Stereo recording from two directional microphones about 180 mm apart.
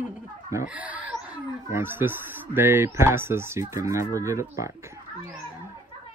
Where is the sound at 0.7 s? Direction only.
10° right (ahead or behind).